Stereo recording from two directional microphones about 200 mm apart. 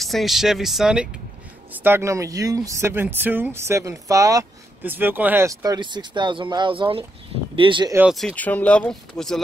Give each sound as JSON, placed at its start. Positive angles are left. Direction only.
{"t": 0.0, "sound": "speech", "side_deg": 0}
{"t": 7.9, "sound": "speech", "side_deg": -5}
{"t": 8.4, "sound": "speech", "side_deg": 10}